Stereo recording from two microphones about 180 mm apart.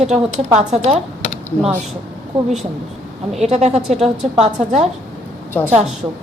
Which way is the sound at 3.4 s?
40° right (ahead or behind).